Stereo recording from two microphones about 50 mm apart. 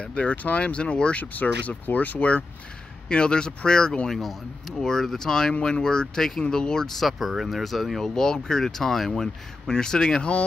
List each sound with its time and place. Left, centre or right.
0.0 s speech: left
4.1 s speech: centre
7.1 s speech: centre
8.1 s speech: centre